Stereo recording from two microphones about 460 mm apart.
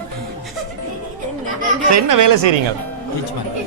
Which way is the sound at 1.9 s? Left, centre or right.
Right.